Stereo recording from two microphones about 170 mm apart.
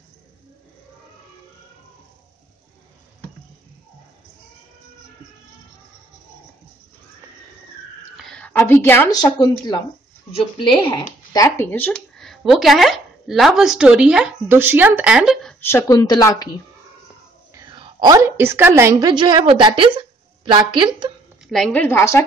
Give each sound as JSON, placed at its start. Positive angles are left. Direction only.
{"t": 8.2, "sound": "a sound", "side_deg": 5}
{"t": 9.1, "sound": "speech", "side_deg": 25}
{"t": 11.3, "sound": "speech", "side_deg": 15}
{"t": 15.6, "sound": "speech", "side_deg": 20}
{"t": 17.6, "sound": "a woman's voice", "side_deg": -25}
{"t": 21.5, "sound": "a woman's voice", "side_deg": 5}